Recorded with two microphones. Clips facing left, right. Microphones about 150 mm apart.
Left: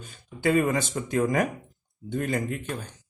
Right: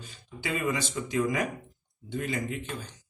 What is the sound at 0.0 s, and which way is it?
A man's voice, 50° left (ahead or behind).